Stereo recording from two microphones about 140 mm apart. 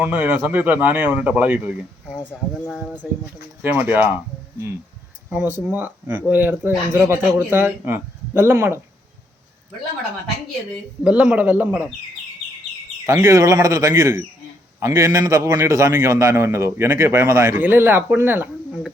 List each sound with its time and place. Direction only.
0.0 s speech: 15° right (ahead or behind)
3.6 s speech: 15° right (ahead or behind)
5.3 s speech: 10° right (ahead or behind)
11.0 s speech: 10° right (ahead or behind)
13.1 s a man's voice: 25° right (ahead or behind)